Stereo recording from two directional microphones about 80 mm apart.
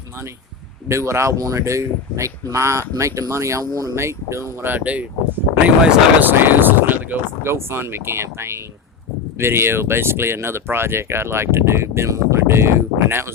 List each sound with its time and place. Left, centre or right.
0.9 s speech: right